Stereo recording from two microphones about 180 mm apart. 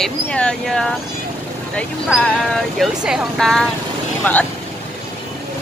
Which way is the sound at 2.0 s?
Centre (ahead or behind).